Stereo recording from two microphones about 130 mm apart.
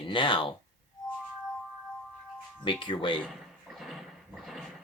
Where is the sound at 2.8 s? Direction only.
40° left (ahead or behind).